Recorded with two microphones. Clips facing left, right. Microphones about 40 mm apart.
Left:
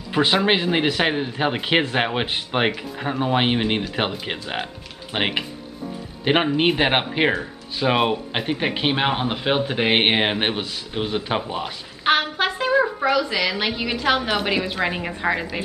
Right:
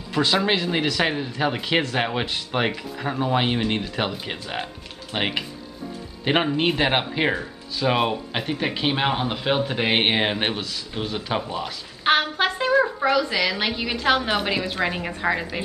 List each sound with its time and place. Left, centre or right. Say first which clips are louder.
0.1 s speech: left 2 dB; left
12.0 s speech: even; centre